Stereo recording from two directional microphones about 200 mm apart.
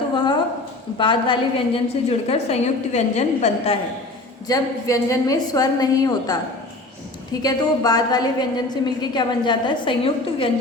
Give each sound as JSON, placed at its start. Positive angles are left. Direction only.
{"t": 0.9, "sound": "a woman's voice", "side_deg": 25}
{"t": 4.4, "sound": "a woman's voice", "side_deg": 15}
{"t": 7.4, "sound": "a woman's voice", "side_deg": 20}